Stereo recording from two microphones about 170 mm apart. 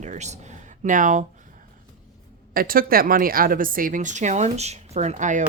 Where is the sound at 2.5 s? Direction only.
60° right (ahead or behind).